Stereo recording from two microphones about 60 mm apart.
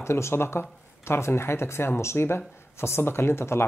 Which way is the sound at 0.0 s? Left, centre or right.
Left.